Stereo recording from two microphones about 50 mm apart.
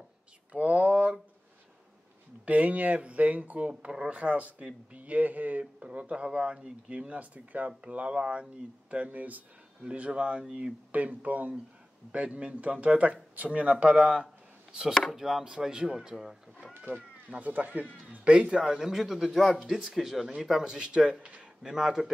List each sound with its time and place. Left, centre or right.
0.5 s a sound: right
2.4 s speech: right
10.9 s speech: right; by 16.3 s centre
16.9 s speech: right
17.4 s speech: right
18.2 s speech: right
21.7 s speech: centre